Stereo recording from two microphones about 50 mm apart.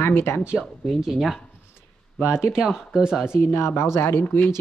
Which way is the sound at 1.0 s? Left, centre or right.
Centre.